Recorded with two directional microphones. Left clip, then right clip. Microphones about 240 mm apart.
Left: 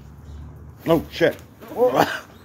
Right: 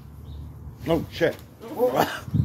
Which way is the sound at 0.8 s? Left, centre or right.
Left.